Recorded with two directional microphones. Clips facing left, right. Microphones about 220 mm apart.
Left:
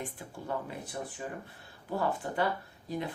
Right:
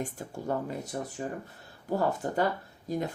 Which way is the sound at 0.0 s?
45° right (ahead or behind).